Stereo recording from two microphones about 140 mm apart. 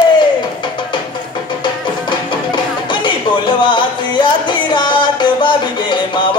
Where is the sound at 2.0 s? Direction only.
35° left (ahead or behind).